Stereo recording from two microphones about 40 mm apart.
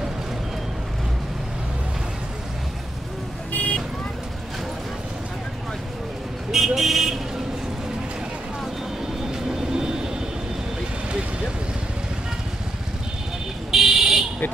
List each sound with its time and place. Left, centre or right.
3.5 s vehicle: left
6.5 s vehicle: centre
9.2 s vehicle: centre
13.7 s buzzer: centre